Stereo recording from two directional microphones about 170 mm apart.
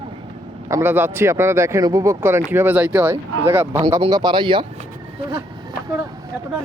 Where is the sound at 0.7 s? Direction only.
10° right (ahead or behind).